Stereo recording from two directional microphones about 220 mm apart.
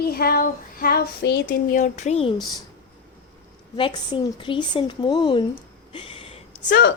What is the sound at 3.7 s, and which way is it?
Speech, 20° left (ahead or behind).